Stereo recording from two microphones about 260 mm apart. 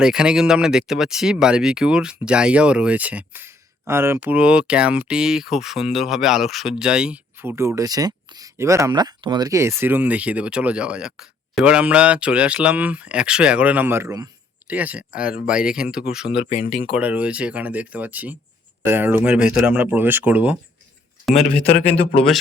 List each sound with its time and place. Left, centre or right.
0.0 s speech: centre
16.5 s speech: left
16.9 s speech: centre